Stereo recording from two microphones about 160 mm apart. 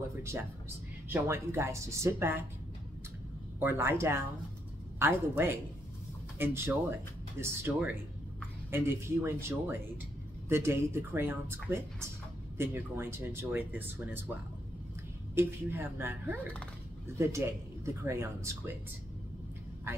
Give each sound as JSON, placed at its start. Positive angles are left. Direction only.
{"t": 1.1, "sound": "speech", "side_deg": -15}
{"t": 3.5, "sound": "speech", "side_deg": -15}
{"t": 15.3, "sound": "speech", "side_deg": -15}
{"t": 17.4, "sound": "speech", "side_deg": -15}